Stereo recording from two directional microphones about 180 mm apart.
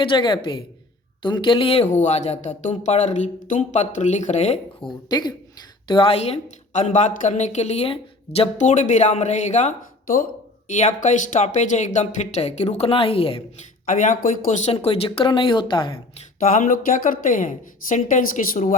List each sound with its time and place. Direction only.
0.0 s speech: 25° left (ahead or behind)
5.0 s speech: 25° left (ahead or behind)
13.8 s speech: 45° left (ahead or behind); by 16.0 s 25° left (ahead or behind)
16.4 s a woman's voice: 50° left (ahead or behind)